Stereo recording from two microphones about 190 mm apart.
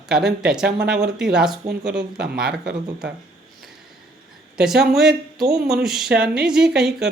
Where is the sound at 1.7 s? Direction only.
60° right (ahead or behind).